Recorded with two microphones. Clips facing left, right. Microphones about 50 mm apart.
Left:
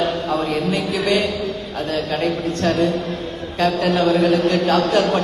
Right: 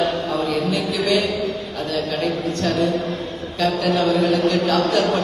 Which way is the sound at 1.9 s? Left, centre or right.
Left.